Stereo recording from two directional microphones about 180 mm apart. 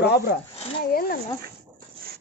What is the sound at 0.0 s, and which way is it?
Rub, 65° left (ahead or behind).